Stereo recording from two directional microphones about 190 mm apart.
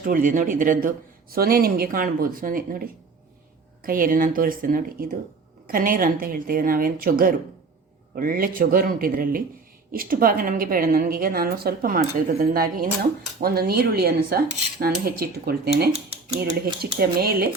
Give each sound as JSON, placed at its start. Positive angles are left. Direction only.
{"t": 0.0, "sound": "a woman's voice", "side_deg": -45}
{"t": 16.8, "sound": "speech", "side_deg": -55}